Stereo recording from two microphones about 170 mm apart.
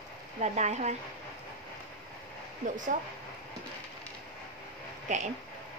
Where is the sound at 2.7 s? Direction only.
50° right (ahead or behind).